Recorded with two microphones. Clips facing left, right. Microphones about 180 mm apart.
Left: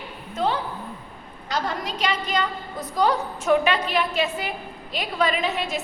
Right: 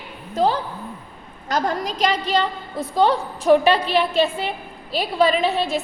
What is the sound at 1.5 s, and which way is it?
A woman's voice, 45° right (ahead or behind).